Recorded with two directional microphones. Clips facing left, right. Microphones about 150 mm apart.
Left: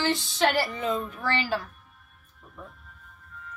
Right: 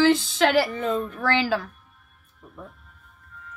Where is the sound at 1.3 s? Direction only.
90° right.